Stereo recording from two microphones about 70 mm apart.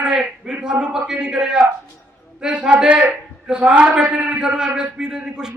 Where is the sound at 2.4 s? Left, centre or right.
Centre.